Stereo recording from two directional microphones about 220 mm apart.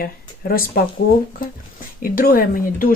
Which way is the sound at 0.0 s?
40° left (ahead or behind).